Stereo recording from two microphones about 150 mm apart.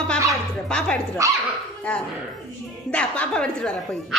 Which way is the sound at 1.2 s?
20° right (ahead or behind).